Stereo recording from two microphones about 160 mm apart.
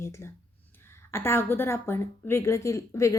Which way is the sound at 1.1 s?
15° left (ahead or behind).